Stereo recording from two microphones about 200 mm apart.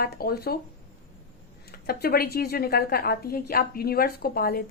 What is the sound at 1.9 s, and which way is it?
A woman's voice, 50° left (ahead or behind).